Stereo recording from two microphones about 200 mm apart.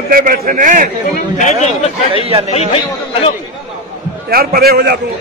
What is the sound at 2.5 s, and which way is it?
Speech, 30° left (ahead or behind).